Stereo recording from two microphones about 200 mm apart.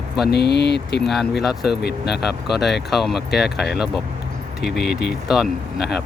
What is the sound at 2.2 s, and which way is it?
Speech, centre (ahead or behind).